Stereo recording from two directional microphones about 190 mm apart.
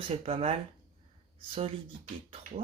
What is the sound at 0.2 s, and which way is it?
Speech, 30° right (ahead or behind).